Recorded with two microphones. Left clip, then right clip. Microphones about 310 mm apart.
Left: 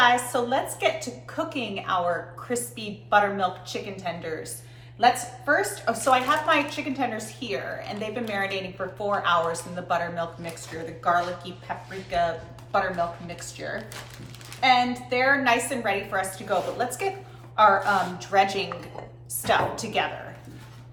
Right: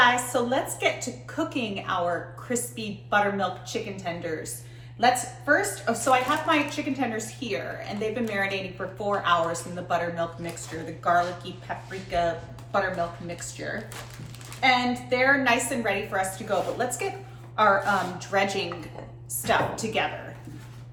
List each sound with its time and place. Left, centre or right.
0.0 s a woman's voice: centre